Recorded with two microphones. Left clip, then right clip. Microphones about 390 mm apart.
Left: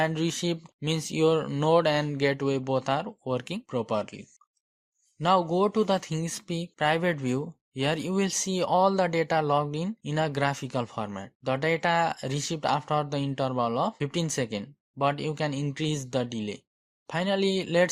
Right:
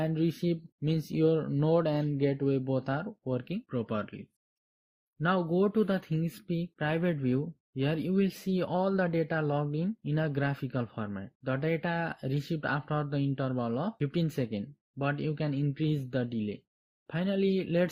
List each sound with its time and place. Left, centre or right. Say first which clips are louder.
0.0 s speech: left 4 dB; centre
5.5 s speech: left 4 dB; centre